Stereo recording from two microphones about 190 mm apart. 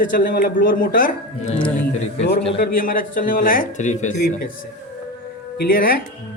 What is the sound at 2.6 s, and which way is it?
Speech, 50° left (ahead or behind).